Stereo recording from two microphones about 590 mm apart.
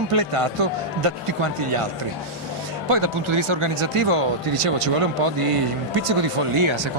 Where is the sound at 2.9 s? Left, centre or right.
Right.